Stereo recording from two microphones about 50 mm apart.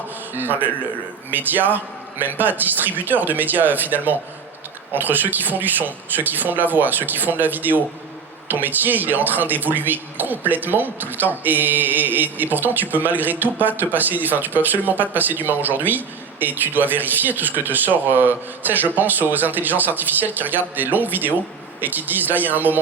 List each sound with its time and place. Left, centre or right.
0.3 s speech: right